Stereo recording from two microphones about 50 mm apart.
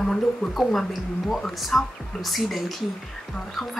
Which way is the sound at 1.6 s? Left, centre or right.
Centre.